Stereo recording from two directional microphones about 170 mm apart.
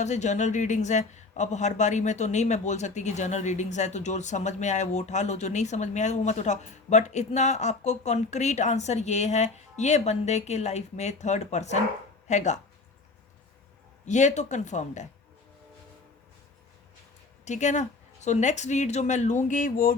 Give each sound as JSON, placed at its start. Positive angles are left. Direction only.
{"t": 0.0, "sound": "speech", "side_deg": 45}
{"t": 14.0, "sound": "speech", "side_deg": 45}
{"t": 17.4, "sound": "speech", "side_deg": 45}